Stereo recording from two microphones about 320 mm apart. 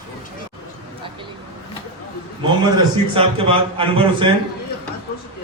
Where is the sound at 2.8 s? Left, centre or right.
Centre.